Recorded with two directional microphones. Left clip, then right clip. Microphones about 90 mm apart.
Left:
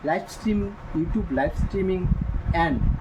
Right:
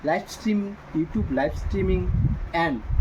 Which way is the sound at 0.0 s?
25° right (ahead or behind).